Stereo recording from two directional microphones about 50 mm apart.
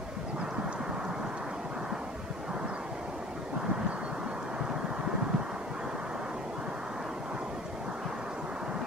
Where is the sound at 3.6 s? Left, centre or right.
Right.